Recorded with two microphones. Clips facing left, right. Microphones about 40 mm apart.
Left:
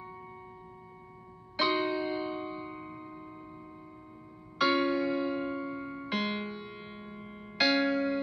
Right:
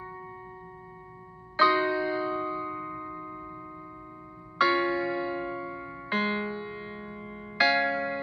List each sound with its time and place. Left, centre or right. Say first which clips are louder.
1.6 s music: right 6 dB; left; by 2.7 s centre
2.7 s tubular bells: right 7 dB; centre
4.6 s music: even; left; by 6.0 s centre
6.0 s music: right 5 dB; left
6.3 s music: right 5 dB; centre
7.5 s music: right 3 dB; left